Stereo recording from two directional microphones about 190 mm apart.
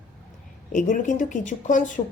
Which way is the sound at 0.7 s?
45° left (ahead or behind).